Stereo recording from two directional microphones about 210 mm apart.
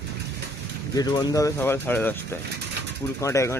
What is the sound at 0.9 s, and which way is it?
Speech, 20° left (ahead or behind).